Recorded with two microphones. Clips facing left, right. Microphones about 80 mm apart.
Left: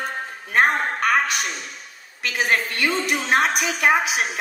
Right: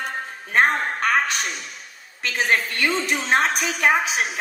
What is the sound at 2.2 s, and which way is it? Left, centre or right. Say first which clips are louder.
A woman's voice: even; right.